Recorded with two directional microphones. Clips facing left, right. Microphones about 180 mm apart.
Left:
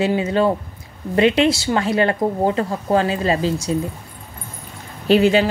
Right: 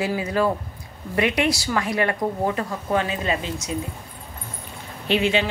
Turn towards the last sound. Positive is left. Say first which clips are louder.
# left 7 dB
turn(degrees=40)  # may be behind; listen again after turning